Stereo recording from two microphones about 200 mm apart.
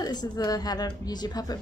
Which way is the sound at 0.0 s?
20° left (ahead or behind).